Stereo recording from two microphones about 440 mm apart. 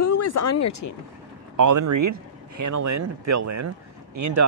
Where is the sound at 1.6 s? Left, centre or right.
Right.